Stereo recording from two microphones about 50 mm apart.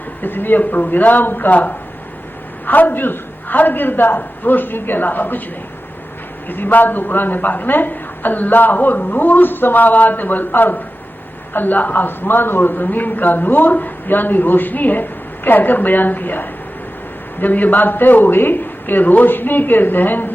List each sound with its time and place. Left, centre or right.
0.2 s a man's voice: left
6.5 s a man's voice: left